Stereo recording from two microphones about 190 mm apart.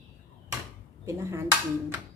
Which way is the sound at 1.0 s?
15° right (ahead or behind).